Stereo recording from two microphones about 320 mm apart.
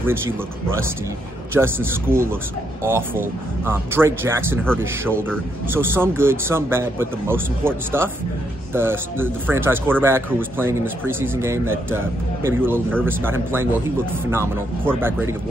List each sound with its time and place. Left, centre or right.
1.5 s speech: centre